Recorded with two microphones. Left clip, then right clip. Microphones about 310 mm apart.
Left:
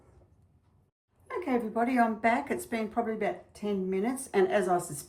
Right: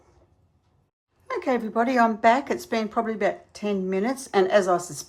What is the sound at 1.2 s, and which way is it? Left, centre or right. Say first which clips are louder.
A woman's voice: right 6 dB; centre.